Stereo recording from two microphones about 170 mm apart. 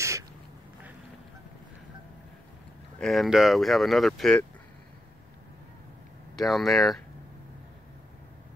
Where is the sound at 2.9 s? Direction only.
Centre (ahead or behind).